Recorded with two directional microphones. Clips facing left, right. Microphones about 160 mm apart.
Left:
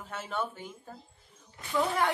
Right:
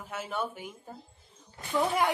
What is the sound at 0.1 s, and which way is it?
Speech, 10° right (ahead or behind).